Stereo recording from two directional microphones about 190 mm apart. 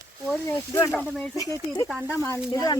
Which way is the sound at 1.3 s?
20° left (ahead or behind).